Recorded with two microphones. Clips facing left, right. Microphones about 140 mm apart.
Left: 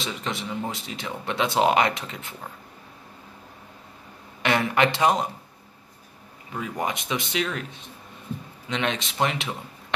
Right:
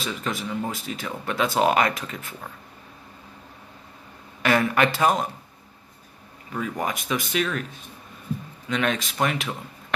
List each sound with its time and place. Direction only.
0.0 s speech: 25° left (ahead or behind)
4.4 s speech: 25° left (ahead or behind)
6.8 s a man's voice: 25° left (ahead or behind)